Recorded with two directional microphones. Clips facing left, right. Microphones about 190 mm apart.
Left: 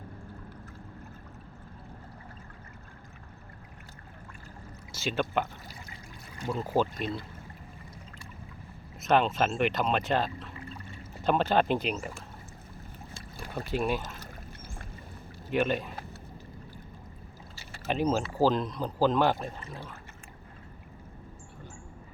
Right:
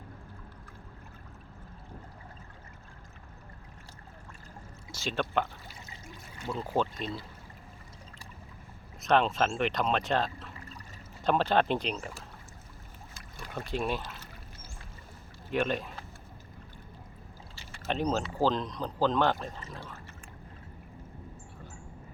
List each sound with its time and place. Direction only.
4.9 s speech: centre (ahead or behind)
6.5 s speech: 5° left (ahead or behind)
9.0 s speech: 5° left (ahead or behind)
13.7 s speech: 5° left (ahead or behind)
14.0 s speech: 45° left (ahead or behind)
15.5 s speech: centre (ahead or behind)
17.8 s speech: 5° left (ahead or behind)